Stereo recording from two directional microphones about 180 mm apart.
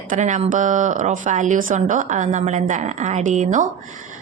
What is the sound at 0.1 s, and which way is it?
A woman's voice, 40° right (ahead or behind).